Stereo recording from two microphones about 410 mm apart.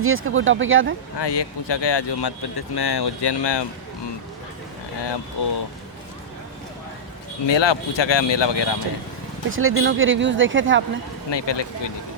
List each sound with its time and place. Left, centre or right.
0.0 s speech: right
1.2 s speech: left
5.0 s speech: left
7.4 s speech: left
9.5 s speech: right
11.3 s speech: left